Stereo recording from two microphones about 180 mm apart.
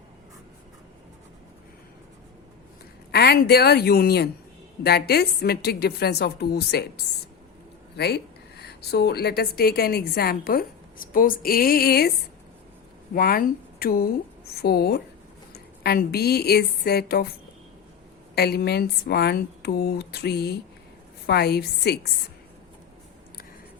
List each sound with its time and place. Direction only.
3.1 s a woman's voice: 60° left (ahead or behind)
13.1 s a woman's voice: 55° left (ahead or behind)
18.3 s a woman's voice: 60° left (ahead or behind)